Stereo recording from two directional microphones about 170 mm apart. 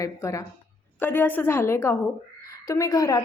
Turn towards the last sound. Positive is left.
turn(degrees=20)  # may be behind; listen again after turning